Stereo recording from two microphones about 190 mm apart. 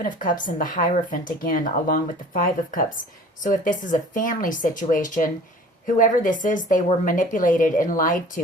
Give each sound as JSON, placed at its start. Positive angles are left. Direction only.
{"t": 0.0, "sound": "speech", "side_deg": 45}